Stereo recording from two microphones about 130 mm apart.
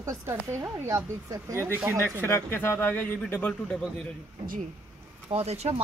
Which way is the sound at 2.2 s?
20° left (ahead or behind).